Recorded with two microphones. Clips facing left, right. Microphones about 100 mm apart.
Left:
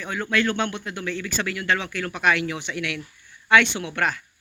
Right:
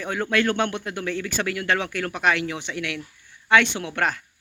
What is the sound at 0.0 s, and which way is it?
A man's voice, 55° right (ahead or behind).